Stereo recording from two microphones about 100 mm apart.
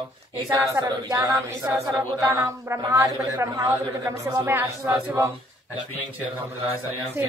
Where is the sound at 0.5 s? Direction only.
35° right (ahead or behind).